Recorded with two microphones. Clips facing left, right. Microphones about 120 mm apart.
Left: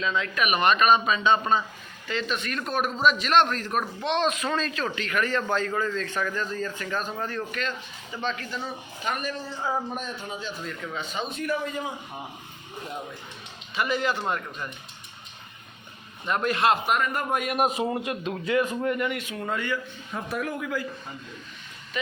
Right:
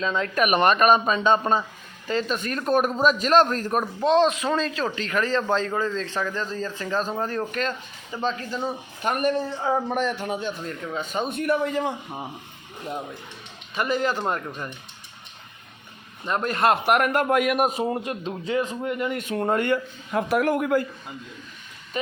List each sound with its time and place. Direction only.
0.0 s a man's voice: 40° right (ahead or behind)
9.0 s speech: 55° right (ahead or behind)
9.9 s a man's voice: 85° right; by 10.5 s 65° right (ahead or behind)
10.7 s speech: 45° right (ahead or behind); by 11.9 s 70° right (ahead or behind)
13.7 s a man's voice: 45° right (ahead or behind)
16.3 s speech: 40° right (ahead or behind)
16.8 s a man's voice: 70° right (ahead or behind)
17.6 s a man's voice: 45° right (ahead or behind); by 19.1 s 20° right (ahead or behind)
19.1 s speech: 45° right (ahead or behind)
22.0 s speech: 40° right (ahead or behind)